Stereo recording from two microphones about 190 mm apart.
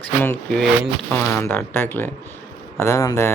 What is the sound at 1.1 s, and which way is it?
Speech, 10° left (ahead or behind).